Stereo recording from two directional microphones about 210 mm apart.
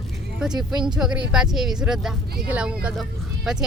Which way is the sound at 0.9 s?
5° right (ahead or behind).